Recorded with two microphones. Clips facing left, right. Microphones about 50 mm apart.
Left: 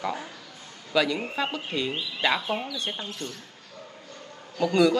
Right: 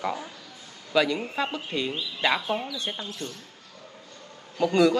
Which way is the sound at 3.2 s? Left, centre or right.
Left.